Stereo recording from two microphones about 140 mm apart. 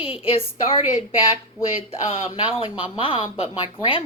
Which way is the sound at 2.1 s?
40° left (ahead or behind).